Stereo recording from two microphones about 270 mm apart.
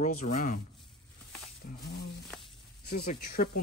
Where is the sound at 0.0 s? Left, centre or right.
Left.